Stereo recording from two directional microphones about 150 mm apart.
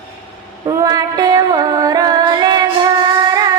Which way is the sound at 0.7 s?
25° right (ahead or behind).